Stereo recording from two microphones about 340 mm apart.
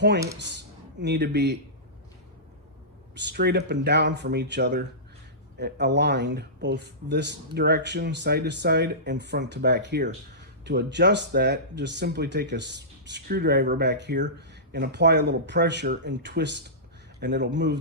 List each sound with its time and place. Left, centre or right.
0.9 s speech: right
3.2 s speech: right